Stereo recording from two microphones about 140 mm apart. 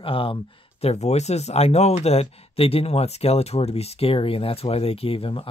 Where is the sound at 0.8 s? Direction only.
50° left (ahead or behind).